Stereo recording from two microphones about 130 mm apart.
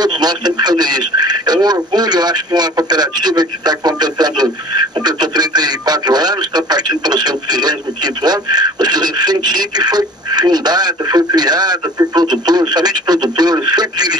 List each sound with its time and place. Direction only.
0.0 s speech: 30° right (ahead or behind)